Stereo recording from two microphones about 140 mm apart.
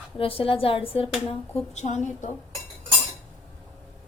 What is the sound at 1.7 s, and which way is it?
Speech, 55° left (ahead or behind).